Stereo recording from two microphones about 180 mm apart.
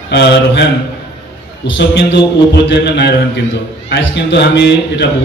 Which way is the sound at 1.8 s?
70° left (ahead or behind).